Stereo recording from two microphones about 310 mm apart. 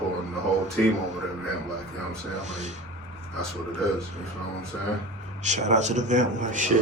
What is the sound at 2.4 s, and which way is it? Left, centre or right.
Speech, right.